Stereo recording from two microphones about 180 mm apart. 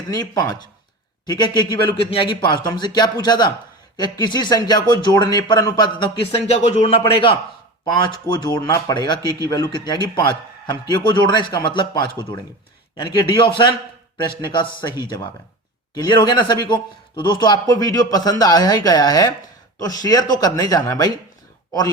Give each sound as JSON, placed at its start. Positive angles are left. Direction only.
{"t": 0.1, "sound": "speech", "side_deg": 20}